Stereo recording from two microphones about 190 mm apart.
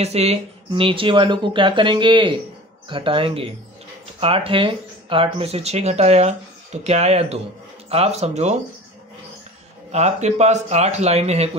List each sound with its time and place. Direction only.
0.0 s speech: 35° right (ahead or behind)
9.8 s speech: 35° right (ahead or behind)